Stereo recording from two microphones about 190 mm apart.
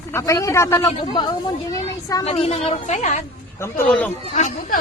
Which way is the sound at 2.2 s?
35° left (ahead or behind).